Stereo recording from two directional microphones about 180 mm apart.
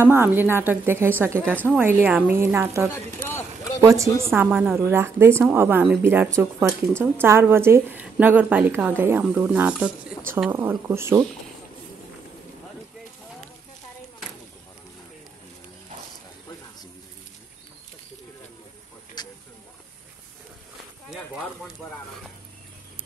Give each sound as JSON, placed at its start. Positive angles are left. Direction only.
{"t": 0.0, "sound": "a woman's voice", "side_deg": -10}
{"t": 1.5, "sound": "speech", "side_deg": 5}
{"t": 1.8, "sound": "a woman's voice", "side_deg": -10}
{"t": 2.9, "sound": "speech", "side_deg": 10}
{"t": 3.8, "sound": "a woman's voice", "side_deg": -15}
{"t": 19.2, "sound": "hiss", "side_deg": 25}
{"t": 21.1, "sound": "a sound", "side_deg": 0}